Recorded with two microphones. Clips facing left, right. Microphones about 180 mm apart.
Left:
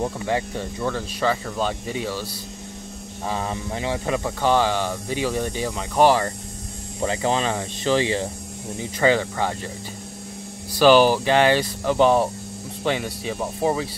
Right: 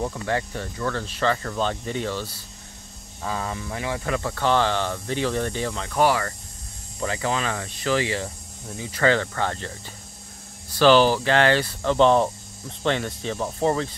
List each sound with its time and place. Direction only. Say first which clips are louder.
0.0 s speech: left 2 dB; 15° left (ahead or behind)
3.3 s speech: left 2 dB; 25° left (ahead or behind)
5.9 s speech: left 4 dB; 25° left (ahead or behind)
8.9 s speech: left 2 dB; 15° left (ahead or behind)
10.7 s speech: left 2 dB; 10° left (ahead or behind)